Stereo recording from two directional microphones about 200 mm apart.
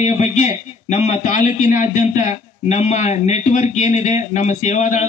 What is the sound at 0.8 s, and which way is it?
A man's voice, 35° left (ahead or behind).